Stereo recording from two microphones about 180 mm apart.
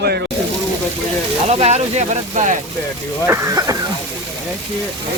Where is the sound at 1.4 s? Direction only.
35° right (ahead or behind).